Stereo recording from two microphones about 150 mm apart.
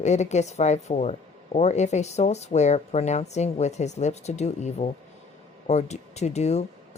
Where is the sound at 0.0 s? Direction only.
50° left (ahead or behind).